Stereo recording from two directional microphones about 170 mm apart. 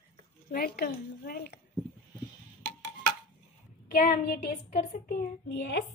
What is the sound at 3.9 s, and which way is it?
A child's voice, 55° left (ahead or behind).